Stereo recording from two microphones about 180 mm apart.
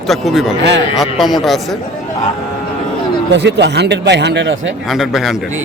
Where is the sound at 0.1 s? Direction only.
Centre (ahead or behind).